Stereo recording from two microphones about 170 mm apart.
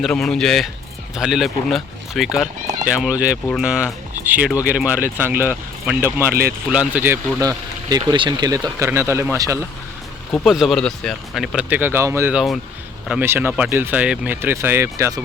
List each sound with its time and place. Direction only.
0.0 s speech: 5° left (ahead or behind); by 9.6 s 15° right (ahead or behind)
10.3 s speech: centre (ahead or behind)
12.3 s speech: 5° right (ahead or behind)